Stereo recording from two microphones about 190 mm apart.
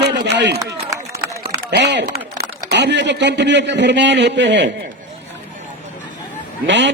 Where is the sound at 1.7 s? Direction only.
65° right (ahead or behind).